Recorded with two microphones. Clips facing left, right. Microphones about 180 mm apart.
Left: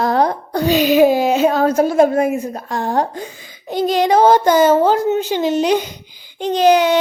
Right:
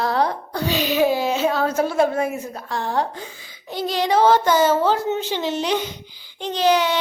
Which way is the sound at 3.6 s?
20° left (ahead or behind).